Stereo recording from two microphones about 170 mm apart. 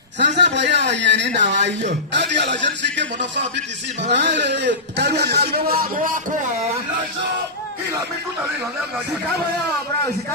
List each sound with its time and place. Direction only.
0.4 s a man's voice: 90° right; by 6.1 s 55° right (ahead or behind)